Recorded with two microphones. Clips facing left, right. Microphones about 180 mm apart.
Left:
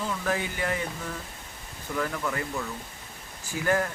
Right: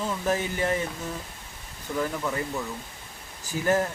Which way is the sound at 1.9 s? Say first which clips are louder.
Right 2 dB; 20° right (ahead or behind).